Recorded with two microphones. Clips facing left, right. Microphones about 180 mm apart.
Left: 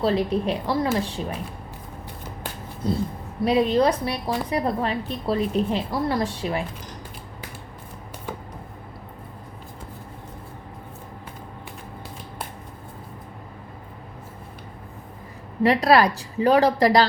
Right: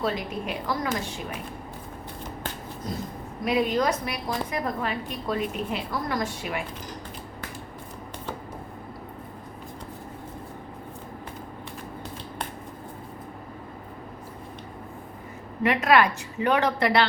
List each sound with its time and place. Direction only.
0.0 s a woman's voice: 35° left (ahead or behind)
2.8 s a woman's voice: 30° left (ahead or behind)
15.6 s a woman's voice: 35° left (ahead or behind)